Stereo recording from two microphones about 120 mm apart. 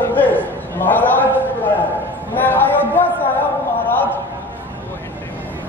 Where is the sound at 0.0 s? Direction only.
15° left (ahead or behind).